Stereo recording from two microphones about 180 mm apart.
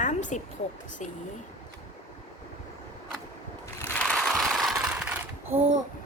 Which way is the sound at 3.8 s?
10° left (ahead or behind).